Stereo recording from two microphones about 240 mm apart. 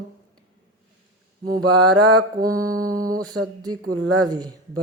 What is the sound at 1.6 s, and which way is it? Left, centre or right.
Speech, right.